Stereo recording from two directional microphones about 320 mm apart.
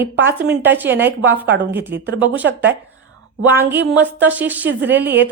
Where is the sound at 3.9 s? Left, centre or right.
Centre.